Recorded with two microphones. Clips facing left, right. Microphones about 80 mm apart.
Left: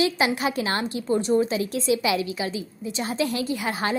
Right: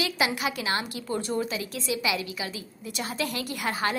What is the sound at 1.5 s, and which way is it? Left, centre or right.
A woman's voice, left.